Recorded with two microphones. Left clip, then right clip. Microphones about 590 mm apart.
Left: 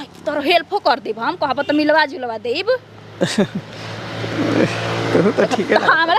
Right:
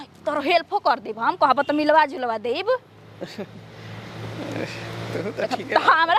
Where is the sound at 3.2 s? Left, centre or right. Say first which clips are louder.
Left 16 dB; left.